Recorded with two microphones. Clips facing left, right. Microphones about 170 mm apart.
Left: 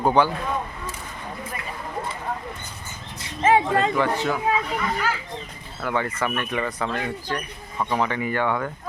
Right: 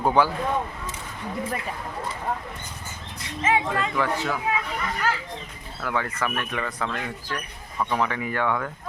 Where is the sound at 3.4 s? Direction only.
35° left (ahead or behind).